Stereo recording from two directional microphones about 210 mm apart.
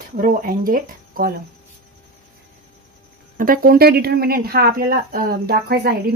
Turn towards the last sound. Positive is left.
turn(degrees=-50)  # may be behind; listen again after turning